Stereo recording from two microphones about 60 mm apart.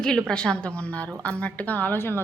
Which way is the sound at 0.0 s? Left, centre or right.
Centre.